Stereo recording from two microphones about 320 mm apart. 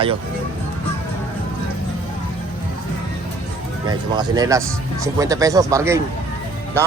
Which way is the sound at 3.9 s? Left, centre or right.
Centre.